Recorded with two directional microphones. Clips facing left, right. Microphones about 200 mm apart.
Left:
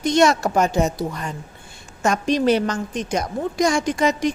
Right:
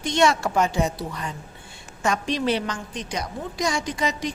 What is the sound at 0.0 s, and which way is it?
A woman's voice, 40° left (ahead or behind).